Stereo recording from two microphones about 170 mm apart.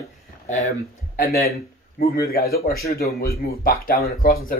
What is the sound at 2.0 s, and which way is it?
Speech, 60° left (ahead or behind).